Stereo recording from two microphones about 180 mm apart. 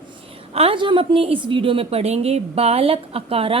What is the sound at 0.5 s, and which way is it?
A woman's voice, 30° right (ahead or behind).